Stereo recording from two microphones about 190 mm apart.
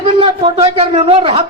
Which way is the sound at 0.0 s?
30° right (ahead or behind).